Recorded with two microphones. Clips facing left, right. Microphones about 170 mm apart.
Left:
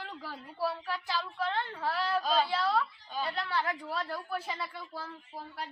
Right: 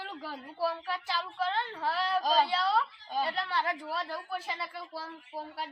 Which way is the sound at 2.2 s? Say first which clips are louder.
Right 3 dB; 40° right (ahead or behind).